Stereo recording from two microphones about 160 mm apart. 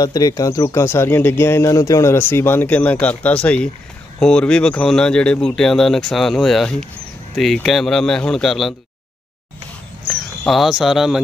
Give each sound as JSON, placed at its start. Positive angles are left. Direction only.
{"t": 0.0, "sound": "speech", "side_deg": 25}
{"t": 10.0, "sound": "speech", "side_deg": 0}